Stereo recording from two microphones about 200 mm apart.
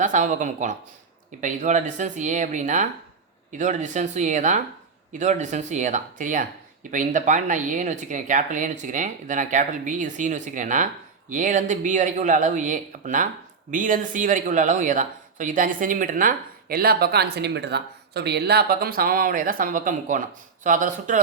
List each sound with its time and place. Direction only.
0.0 s speech: 40° right (ahead or behind)